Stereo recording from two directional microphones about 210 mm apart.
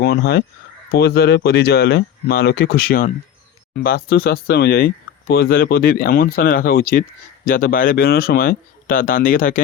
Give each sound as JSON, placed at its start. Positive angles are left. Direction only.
{"t": 0.0, "sound": "speech", "side_deg": 50}